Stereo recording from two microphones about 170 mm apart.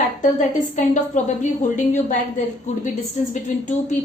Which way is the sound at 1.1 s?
45° left (ahead or behind).